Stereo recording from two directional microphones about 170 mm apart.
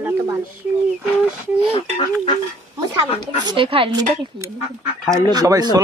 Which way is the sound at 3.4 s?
25° right (ahead or behind).